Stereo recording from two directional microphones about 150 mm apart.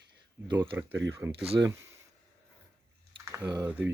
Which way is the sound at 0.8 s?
15° right (ahead or behind).